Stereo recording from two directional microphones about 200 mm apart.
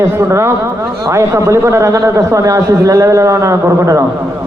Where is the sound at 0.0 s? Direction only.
15° right (ahead or behind).